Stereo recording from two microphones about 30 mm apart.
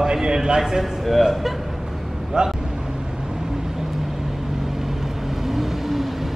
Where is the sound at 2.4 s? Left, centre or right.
Right.